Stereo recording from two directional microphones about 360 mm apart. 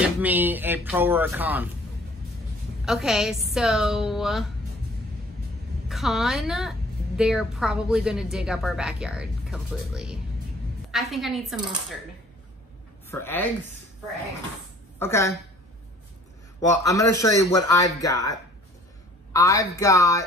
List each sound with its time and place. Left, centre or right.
0.0 s a woman's voice: centre
2.8 s a woman's voice: centre
5.9 s a woman's voice: centre
13.1 s speech: centre
15.0 s speech: centre
16.6 s speech: centre